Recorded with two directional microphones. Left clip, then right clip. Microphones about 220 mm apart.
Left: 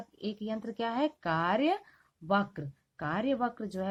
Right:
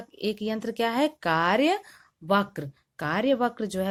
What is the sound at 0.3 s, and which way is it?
Speech, 40° right (ahead or behind).